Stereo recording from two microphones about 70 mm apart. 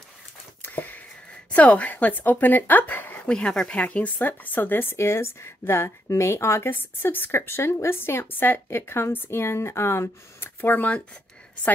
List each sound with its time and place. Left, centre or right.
0.6 s a sound: left
1.5 s speech: left
3.3 s speech: centre